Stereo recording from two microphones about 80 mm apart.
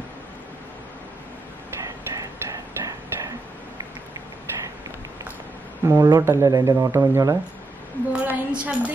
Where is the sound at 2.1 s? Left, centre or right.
Right.